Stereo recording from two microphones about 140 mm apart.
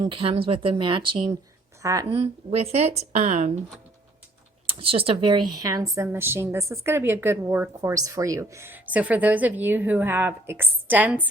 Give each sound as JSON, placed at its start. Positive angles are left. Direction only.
{"t": 0.0, "sound": "speech", "side_deg": -40}
{"t": 1.8, "sound": "a woman's voice", "side_deg": -25}
{"t": 2.0, "sound": "speech", "side_deg": -45}
{"t": 4.8, "sound": "a woman's voice", "side_deg": -40}